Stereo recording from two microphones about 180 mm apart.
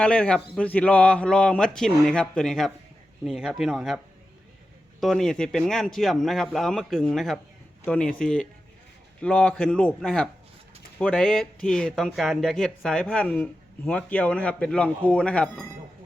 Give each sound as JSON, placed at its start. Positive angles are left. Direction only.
{"t": 0.0, "sound": "speech", "side_deg": 5}